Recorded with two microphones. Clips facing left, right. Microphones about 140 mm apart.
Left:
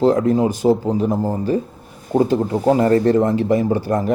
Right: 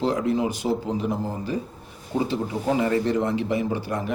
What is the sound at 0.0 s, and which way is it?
Speech, 45° left (ahead or behind).